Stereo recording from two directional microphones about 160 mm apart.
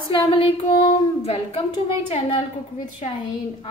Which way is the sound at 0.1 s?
35° left (ahead or behind).